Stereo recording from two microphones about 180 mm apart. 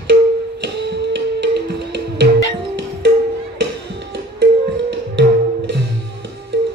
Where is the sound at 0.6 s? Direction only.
70° right (ahead or behind).